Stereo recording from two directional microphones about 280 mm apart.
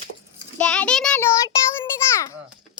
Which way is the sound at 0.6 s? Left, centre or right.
Centre.